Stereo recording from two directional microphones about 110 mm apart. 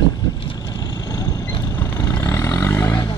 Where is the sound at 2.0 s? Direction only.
25° left (ahead or behind).